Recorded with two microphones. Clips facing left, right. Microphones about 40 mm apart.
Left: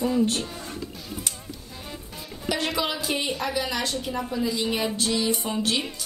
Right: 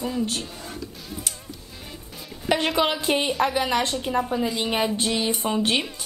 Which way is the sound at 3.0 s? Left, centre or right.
Right.